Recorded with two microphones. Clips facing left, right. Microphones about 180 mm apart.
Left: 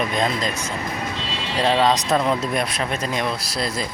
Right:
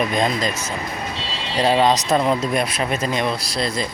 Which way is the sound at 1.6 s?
5° right (ahead or behind).